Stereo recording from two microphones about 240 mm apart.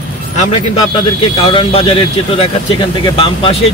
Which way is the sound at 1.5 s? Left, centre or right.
Left.